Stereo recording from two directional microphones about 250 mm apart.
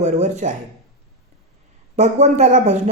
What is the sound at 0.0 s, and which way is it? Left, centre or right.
Speech, right.